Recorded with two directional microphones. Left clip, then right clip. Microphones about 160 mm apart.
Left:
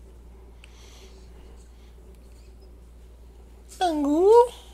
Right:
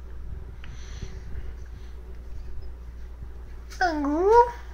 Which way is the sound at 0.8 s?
50° left (ahead or behind).